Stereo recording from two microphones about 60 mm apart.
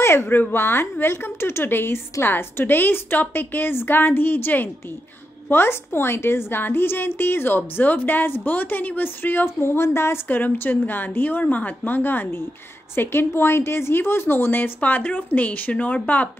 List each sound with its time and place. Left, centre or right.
0.0 s a woman's voice: left
10.2 s a woman's voice: left